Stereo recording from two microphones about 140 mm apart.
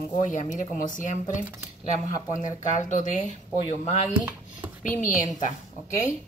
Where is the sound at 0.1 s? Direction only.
65° left (ahead or behind).